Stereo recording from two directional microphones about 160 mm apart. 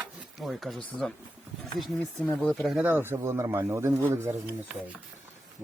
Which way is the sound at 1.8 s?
Centre (ahead or behind).